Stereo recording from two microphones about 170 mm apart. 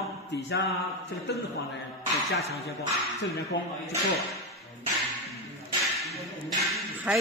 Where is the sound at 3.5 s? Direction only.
90° left.